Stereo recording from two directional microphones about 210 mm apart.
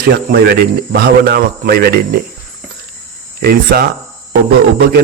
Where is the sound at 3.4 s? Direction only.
45° right (ahead or behind).